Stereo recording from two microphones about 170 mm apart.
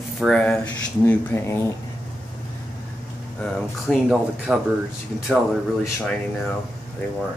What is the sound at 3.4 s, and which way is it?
Speech, centre (ahead or behind).